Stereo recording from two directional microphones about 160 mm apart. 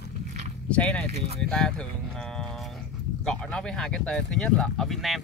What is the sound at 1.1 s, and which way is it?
Speech, 40° right (ahead or behind).